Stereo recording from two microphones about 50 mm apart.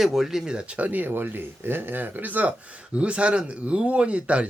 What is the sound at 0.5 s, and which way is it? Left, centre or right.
Speech, right.